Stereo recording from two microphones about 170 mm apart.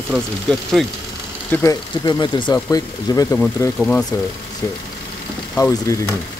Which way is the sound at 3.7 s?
5° left (ahead or behind).